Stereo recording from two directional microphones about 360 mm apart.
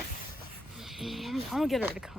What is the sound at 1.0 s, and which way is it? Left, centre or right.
Speech, centre.